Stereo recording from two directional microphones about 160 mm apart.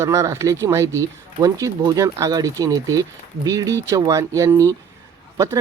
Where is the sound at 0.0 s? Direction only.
20° right (ahead or behind).